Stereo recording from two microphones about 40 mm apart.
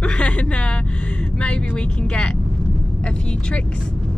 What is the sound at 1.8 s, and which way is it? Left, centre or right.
Speech, left.